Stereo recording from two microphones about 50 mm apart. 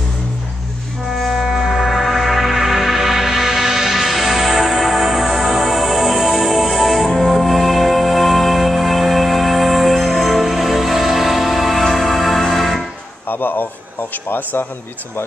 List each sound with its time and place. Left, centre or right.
1.1 s music: centre
13.3 s a sound: left
14.3 s a man's voice: left